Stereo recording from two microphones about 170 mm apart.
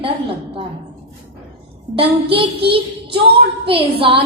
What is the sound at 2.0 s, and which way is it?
A woman's voice, 30° right (ahead or behind).